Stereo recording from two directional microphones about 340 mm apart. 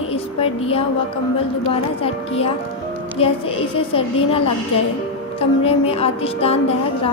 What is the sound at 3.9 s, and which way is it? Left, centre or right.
Speech, centre.